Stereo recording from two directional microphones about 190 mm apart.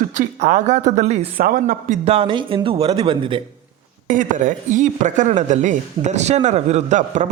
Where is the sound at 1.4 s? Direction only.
45° right (ahead or behind).